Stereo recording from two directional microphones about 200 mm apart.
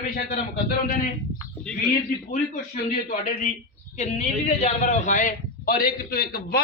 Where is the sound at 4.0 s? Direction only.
35° left (ahead or behind).